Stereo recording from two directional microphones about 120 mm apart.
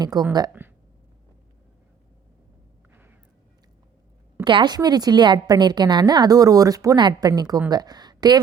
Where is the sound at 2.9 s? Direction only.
15° right (ahead or behind).